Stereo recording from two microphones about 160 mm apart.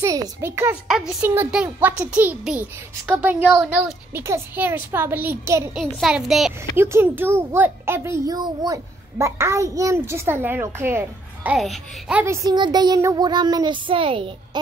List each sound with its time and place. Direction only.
0.0 s a child's voice: 20° right (ahead or behind)
5.8 s a child's voice: 5° right (ahead or behind)
6.8 s a child's voice: 15° right (ahead or behind)
11.5 s a child's voice: centre (ahead or behind); by 14.6 s 35° right (ahead or behind)